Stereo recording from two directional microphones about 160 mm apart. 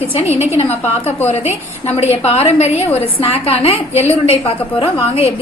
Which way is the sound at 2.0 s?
40° left (ahead or behind).